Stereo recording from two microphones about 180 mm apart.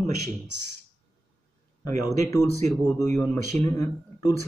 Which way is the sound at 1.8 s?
20° left (ahead or behind).